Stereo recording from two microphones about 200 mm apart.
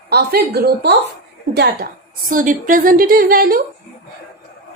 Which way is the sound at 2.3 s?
40° right (ahead or behind).